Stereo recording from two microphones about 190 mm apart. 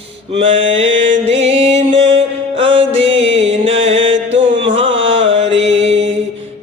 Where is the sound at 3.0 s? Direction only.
75° right (ahead or behind).